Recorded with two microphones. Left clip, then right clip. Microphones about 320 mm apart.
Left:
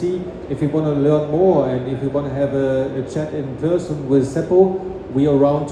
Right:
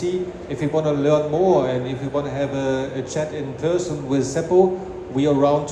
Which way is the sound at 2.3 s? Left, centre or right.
Centre.